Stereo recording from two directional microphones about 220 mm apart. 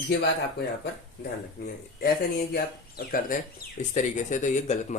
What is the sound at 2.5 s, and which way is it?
A man's voice, 40° left (ahead or behind).